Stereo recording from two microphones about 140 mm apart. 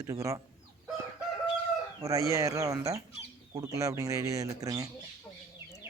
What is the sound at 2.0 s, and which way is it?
Speech, 25° right (ahead or behind).